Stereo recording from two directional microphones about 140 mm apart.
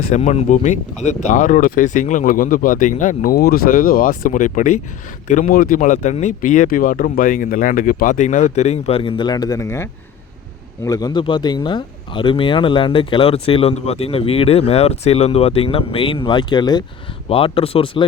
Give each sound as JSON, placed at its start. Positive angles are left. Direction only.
{"t": 0.1, "sound": "speech", "side_deg": 55}
{"t": 5.3, "sound": "speech", "side_deg": 80}
{"t": 17.2, "sound": "speech", "side_deg": 40}